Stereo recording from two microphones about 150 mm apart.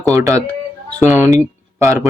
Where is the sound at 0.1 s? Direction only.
20° right (ahead or behind).